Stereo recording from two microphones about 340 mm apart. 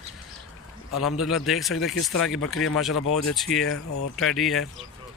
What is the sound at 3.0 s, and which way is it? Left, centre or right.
Speech, left.